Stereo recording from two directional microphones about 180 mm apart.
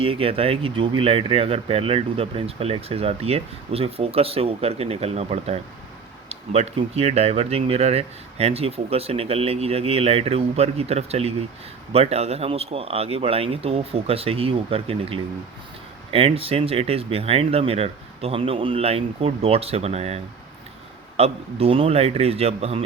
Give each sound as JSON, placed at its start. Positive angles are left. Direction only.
{"t": 0.0, "sound": "speech", "side_deg": -30}